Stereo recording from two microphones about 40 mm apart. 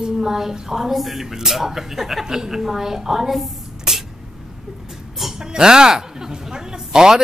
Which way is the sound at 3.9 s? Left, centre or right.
Centre.